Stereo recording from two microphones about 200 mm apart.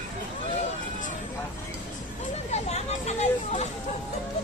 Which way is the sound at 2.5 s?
35° left (ahead or behind).